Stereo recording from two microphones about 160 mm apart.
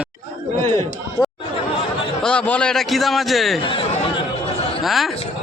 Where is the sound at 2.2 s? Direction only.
5° left (ahead or behind).